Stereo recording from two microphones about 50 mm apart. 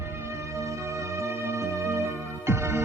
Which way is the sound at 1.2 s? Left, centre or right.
Right.